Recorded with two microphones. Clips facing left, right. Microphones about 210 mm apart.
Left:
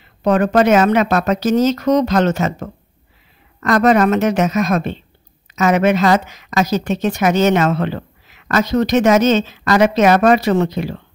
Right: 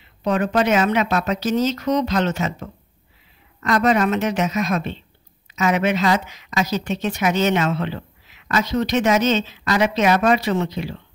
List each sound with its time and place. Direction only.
0.2 s a woman's voice: 45° left (ahead or behind)